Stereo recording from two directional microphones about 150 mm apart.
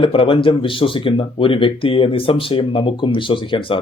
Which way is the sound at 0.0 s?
35° left (ahead or behind).